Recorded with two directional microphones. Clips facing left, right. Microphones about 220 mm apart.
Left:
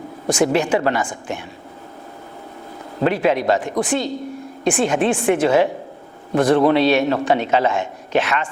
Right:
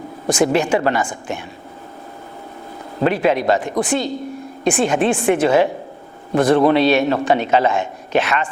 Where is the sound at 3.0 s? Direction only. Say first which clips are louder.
Right 1 dB; 15° right (ahead or behind).